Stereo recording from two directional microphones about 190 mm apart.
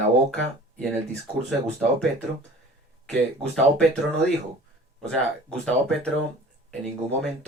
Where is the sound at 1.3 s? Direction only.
25° right (ahead or behind).